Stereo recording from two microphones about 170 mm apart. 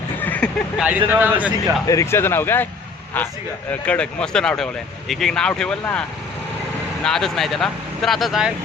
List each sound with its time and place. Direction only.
0.2 s vehicle: 10° left (ahead or behind)
0.8 s speech: 10° right (ahead or behind)
1.9 s speech: 15° left (ahead or behind); by 8.5 s 5° right (ahead or behind)